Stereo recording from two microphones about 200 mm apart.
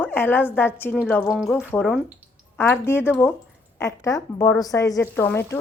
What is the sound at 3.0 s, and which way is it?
Speech, 5° right (ahead or behind).